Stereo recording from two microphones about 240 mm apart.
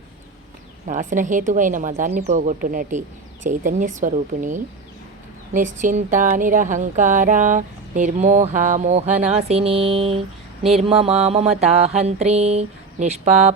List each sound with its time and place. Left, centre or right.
0.9 s speech: right
10.8 s mantra: right